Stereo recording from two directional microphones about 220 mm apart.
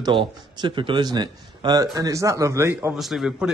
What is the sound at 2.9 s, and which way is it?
Speech, centre (ahead or behind).